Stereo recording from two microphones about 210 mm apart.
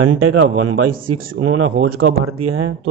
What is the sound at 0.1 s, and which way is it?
Speech, 90° right.